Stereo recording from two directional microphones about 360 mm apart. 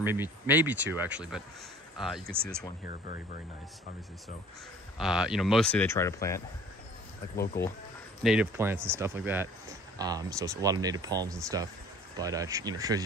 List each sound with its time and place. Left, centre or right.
0.0 s speech: centre
2.2 s speech: right
4.9 s speech: centre
8.2 s speech: centre